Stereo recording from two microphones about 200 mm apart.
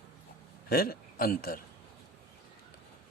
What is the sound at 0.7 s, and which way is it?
Speech, 50° left (ahead or behind).